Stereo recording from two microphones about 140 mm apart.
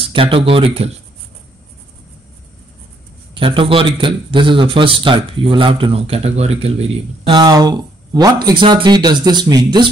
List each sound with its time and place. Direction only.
0.0 s speech: 40° right (ahead or behind)
3.3 s speech: 40° right (ahead or behind)
7.3 s speech: 30° right (ahead or behind)